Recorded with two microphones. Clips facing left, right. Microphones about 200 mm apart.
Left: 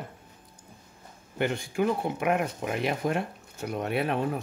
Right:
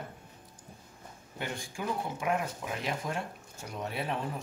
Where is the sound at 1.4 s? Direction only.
65° left (ahead or behind).